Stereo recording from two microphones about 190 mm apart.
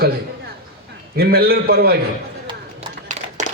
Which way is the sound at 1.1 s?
55° right (ahead or behind).